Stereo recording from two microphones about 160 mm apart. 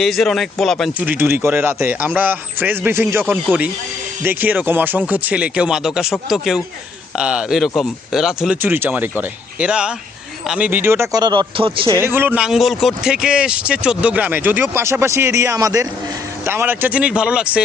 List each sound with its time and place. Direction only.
0.0 s speech: centre (ahead or behind)
1.0 s speech: 15° right (ahead or behind); by 11.9 s 35° right (ahead or behind)
12.0 s speech: 15° right (ahead or behind)